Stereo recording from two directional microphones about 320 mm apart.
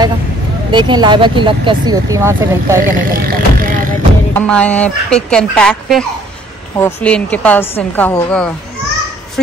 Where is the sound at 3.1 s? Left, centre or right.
Right.